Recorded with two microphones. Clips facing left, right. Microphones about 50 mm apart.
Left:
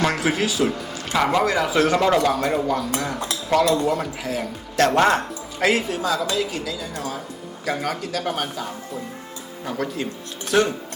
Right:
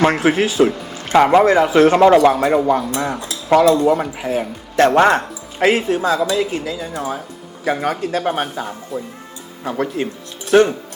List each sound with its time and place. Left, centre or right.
0.0 s a man's voice: right
8.9 s speech: centre
9.6 s a man's voice: right